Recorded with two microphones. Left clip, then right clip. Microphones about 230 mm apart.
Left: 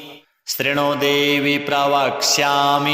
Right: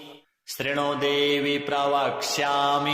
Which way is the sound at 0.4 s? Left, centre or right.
Left.